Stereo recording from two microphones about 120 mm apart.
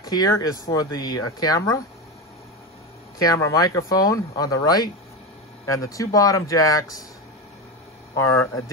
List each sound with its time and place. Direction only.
0.0 s speech: 30° left (ahead or behind)
3.2 s speech: 30° left (ahead or behind)
8.2 s speech: 25° left (ahead or behind)